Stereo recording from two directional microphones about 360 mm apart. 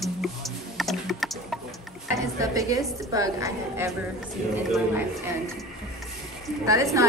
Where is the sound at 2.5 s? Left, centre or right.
Centre.